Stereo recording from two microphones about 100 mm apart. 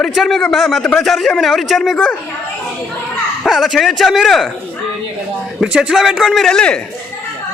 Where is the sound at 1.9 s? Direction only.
15° left (ahead or behind).